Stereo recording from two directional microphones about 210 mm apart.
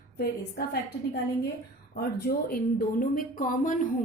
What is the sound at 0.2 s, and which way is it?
A woman's voice, 50° left (ahead or behind).